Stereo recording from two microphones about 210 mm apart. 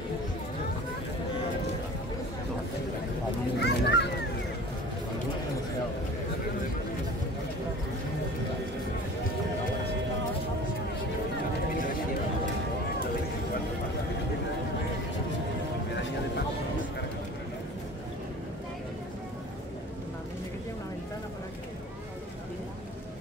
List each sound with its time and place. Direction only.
3.5 s children playing: 55° left (ahead or behind)